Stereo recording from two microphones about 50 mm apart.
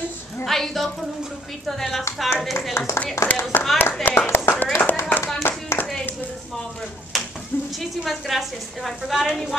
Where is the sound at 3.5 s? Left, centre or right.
Left.